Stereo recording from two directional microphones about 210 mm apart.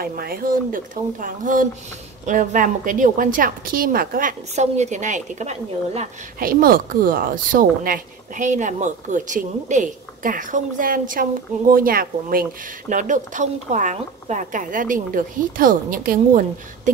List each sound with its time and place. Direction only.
0.0 s a woman's voice: 45° right (ahead or behind)